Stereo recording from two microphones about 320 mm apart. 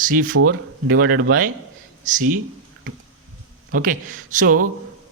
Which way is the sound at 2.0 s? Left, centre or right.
Right.